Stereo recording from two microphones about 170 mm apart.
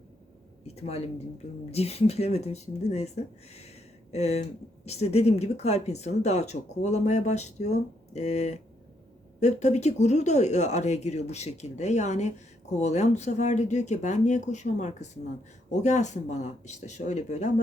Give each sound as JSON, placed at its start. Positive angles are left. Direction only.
{"t": 0.6, "sound": "speech", "side_deg": 40}